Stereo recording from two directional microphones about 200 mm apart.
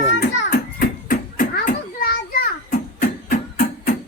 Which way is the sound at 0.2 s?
45° left (ahead or behind).